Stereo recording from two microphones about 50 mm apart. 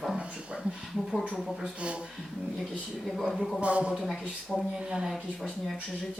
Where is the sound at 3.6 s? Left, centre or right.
Right.